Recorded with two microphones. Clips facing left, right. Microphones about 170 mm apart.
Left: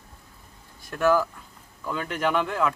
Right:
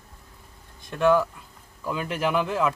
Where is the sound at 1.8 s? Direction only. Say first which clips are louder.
Even; 5° right (ahead or behind).